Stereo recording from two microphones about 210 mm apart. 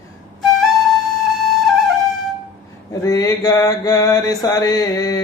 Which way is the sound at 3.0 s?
15° left (ahead or behind).